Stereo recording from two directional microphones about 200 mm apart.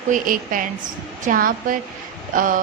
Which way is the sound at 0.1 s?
45° right (ahead or behind).